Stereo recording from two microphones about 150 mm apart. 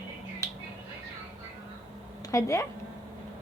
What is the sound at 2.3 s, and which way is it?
Speech, 20° left (ahead or behind).